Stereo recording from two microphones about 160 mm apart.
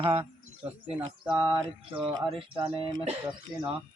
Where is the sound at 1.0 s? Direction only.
30° right (ahead or behind).